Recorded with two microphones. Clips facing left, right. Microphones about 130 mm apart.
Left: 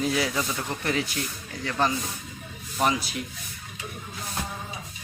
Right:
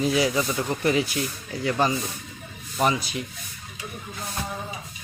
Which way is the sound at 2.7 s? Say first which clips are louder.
Right 2 dB; centre (ahead or behind).